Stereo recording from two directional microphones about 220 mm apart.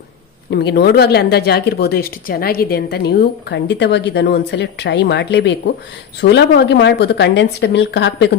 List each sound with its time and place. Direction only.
0.5 s speech: 50° left (ahead or behind)